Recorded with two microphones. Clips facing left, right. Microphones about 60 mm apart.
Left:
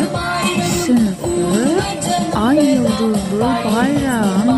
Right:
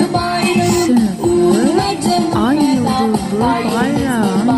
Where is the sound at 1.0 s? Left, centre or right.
Centre.